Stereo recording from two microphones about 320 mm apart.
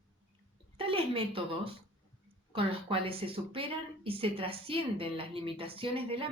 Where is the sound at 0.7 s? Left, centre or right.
Centre.